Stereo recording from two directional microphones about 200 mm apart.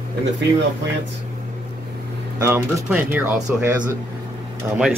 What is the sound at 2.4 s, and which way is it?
Speech, 10° right (ahead or behind).